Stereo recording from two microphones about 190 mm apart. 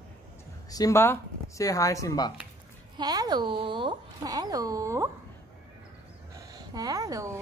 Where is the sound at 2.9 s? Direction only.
20° right (ahead or behind).